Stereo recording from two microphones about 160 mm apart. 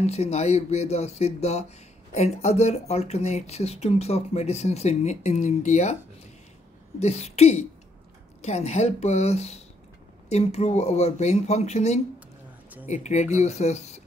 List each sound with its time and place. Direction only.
0.0 s speech: 40° left (ahead or behind)
7.0 s speech: 40° left (ahead or behind)